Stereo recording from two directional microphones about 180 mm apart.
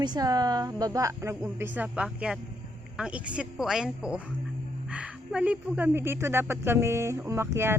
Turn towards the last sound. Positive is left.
turn(degrees=-15)  # may be behind; listen again after turning